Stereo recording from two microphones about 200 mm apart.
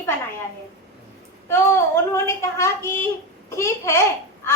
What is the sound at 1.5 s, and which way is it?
A woman's voice, 15° left (ahead or behind).